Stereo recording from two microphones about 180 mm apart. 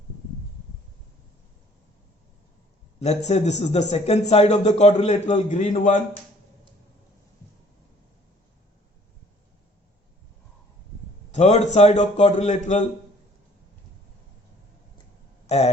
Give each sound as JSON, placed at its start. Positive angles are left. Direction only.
{"t": 3.0, "sound": "a man's voice", "side_deg": 40}
{"t": 11.3, "sound": "a man's voice", "side_deg": 40}
{"t": 15.4, "sound": "a sound", "side_deg": 35}